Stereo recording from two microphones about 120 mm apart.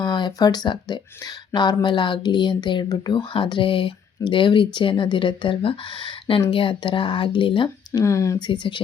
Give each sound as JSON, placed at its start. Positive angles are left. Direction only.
{"t": 0.0, "sound": "speech", "side_deg": 40}
{"t": 8.0, "sound": "speech", "side_deg": 25}
{"t": 8.4, "sound": "speech", "side_deg": 40}